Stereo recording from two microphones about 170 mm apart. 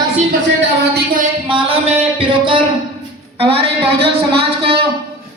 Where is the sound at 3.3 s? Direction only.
35° right (ahead or behind).